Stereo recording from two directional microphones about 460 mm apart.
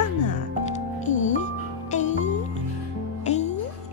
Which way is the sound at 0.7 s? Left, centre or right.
Centre.